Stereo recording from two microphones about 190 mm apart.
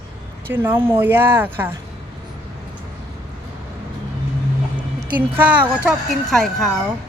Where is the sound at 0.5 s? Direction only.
10° right (ahead or behind).